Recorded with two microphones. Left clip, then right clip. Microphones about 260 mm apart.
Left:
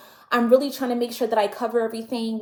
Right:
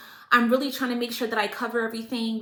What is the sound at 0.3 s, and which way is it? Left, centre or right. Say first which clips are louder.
A woman's voice: left 3 dB; centre.